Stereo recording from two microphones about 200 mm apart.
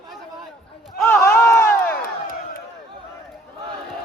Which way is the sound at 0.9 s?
10° left (ahead or behind).